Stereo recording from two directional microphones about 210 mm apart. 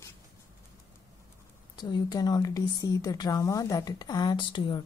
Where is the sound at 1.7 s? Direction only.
20° left (ahead or behind).